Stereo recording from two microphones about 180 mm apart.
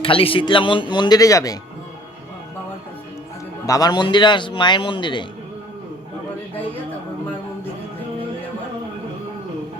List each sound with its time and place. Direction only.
0.0 s speech: 30° left (ahead or behind)
3.7 s speech: 20° left (ahead or behind)